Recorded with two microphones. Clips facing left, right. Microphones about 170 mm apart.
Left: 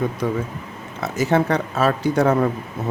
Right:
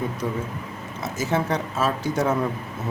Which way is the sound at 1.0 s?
65° left (ahead or behind).